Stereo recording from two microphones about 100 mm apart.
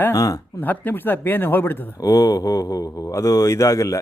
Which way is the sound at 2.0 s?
35° left (ahead or behind).